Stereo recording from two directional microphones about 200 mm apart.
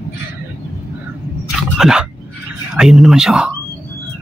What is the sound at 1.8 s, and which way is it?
Speech, 5° right (ahead or behind).